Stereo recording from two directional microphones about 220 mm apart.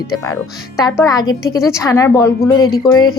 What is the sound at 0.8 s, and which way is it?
Speech, 15° left (ahead or behind).